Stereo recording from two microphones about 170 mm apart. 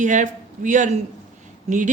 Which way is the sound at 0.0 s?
45° right (ahead or behind).